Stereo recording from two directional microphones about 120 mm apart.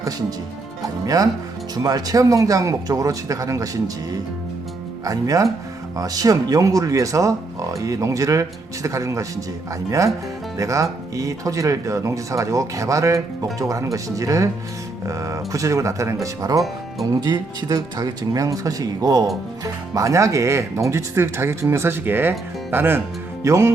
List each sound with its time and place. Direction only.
0.8 s speech: 30° right (ahead or behind)
5.0 s speech: 30° right (ahead or behind)
10.6 s speech: 25° right (ahead or behind)